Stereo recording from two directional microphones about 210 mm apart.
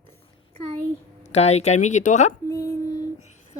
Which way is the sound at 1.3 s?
30° left (ahead or behind).